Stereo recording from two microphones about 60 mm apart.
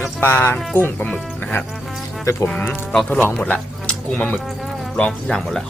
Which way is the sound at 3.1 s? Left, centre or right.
Left.